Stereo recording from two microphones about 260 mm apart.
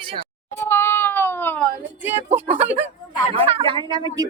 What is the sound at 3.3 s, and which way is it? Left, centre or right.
Speech, right.